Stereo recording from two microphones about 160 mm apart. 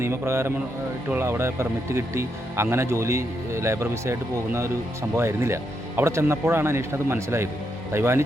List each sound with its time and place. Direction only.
0.0 s speech: 15° right (ahead or behind)